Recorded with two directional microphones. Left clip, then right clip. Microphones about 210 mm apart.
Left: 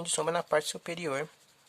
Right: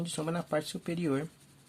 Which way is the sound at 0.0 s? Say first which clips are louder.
Left 5 dB; 35° left (ahead or behind).